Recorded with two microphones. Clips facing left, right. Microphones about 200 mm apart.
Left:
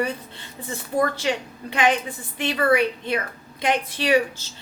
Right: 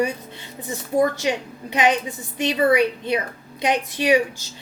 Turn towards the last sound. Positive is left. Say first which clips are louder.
# right 2 dB
turn(degrees=-15)  # may be behind; listen again after turning